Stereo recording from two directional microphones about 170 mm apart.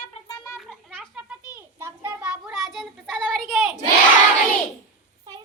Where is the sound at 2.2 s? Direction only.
5° right (ahead or behind).